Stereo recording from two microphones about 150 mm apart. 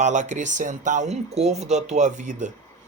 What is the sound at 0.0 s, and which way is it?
A man's voice, 55° right (ahead or behind).